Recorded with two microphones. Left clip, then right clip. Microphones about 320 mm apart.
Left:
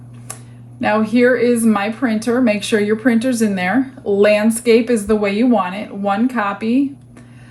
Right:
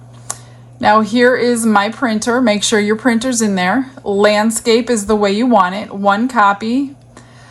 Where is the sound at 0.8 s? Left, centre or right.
Right.